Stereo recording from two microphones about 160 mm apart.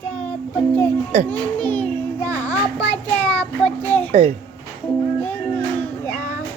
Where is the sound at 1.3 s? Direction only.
10° left (ahead or behind).